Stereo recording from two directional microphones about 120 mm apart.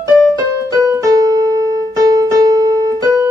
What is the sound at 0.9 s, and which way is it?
Keyboard, 30° right (ahead or behind).